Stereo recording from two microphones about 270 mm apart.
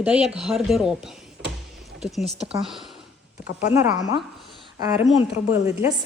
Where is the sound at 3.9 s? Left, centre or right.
Left.